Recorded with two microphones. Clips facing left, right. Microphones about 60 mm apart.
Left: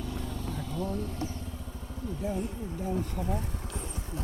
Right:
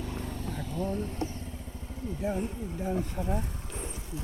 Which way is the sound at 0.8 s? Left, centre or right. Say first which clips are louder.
Right 2 dB; right.